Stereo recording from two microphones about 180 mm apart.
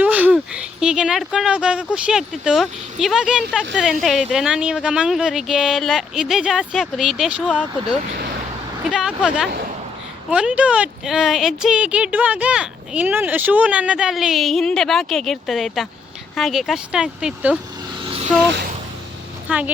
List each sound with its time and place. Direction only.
0.0 s a sound: 10° right (ahead or behind)
0.3 s speech: 5° right (ahead or behind)
8.8 s speech: 5° right (ahead or behind)
18.0 s vehicle: 30° right (ahead or behind)
19.5 s speech: 5° right (ahead or behind)